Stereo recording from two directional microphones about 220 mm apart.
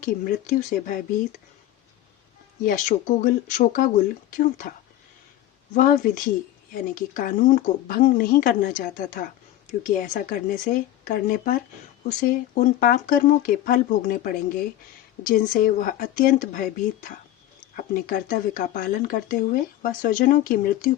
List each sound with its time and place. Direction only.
0.0 s speech: 40° left (ahead or behind)
2.6 s speech: 35° left (ahead or behind)
5.7 s speech: 40° left (ahead or behind)